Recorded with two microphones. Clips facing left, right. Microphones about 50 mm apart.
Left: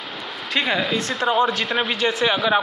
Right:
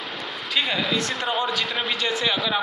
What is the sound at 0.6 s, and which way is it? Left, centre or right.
A man's voice, left.